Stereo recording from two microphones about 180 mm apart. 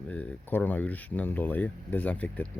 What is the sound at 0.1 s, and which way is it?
Speech, 10° left (ahead or behind).